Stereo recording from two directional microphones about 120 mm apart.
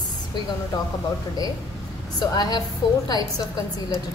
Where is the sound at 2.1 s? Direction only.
35° left (ahead or behind).